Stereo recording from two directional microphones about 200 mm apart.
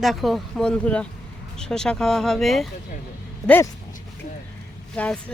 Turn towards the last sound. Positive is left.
turn(degrees=5)  # may be behind; listen again after turning